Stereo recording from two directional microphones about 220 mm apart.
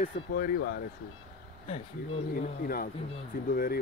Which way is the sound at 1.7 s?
30° left (ahead or behind).